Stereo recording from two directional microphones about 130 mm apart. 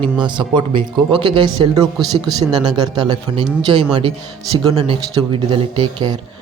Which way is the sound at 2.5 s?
30° right (ahead or behind).